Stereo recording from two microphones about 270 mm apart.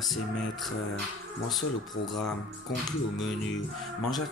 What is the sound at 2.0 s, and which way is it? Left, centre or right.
Speech, centre.